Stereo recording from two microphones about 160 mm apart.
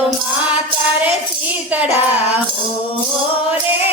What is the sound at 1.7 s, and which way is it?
Music, 10° right (ahead or behind).